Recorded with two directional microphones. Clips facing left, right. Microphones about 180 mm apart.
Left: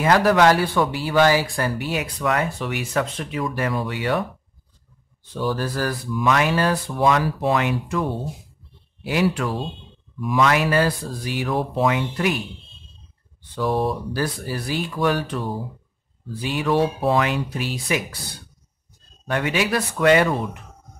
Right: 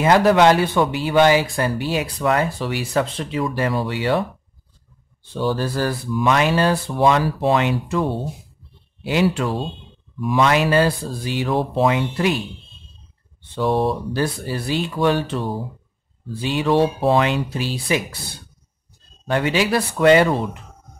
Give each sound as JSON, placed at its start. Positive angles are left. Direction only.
{"t": 0.0, "sound": "speech", "side_deg": -25}
{"t": 19.2, "sound": "speech", "side_deg": -30}